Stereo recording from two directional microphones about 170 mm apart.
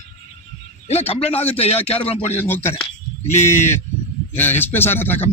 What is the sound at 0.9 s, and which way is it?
A man's voice, 35° left (ahead or behind).